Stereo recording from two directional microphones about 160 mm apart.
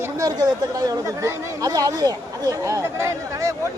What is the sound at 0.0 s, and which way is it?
A man's voice, 25° right (ahead or behind).